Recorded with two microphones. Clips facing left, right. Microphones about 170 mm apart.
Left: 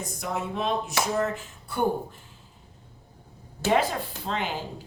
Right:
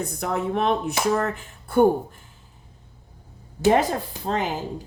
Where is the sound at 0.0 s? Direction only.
60° right (ahead or behind).